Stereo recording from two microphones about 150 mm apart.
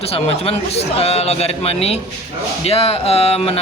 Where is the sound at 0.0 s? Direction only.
40° left (ahead or behind).